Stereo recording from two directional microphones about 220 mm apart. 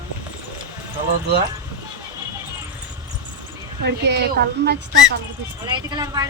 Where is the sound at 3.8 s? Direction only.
50° right (ahead or behind).